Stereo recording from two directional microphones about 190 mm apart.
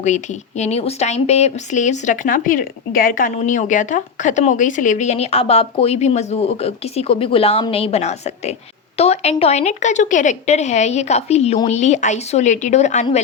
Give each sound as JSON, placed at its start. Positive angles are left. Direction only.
{"t": 0.0, "sound": "speech", "side_deg": 40}